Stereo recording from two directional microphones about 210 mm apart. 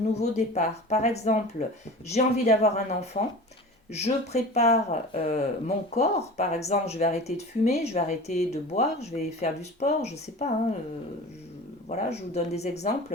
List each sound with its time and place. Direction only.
0.2 s speech: 30° left (ahead or behind)
11.9 s speech: 30° left (ahead or behind)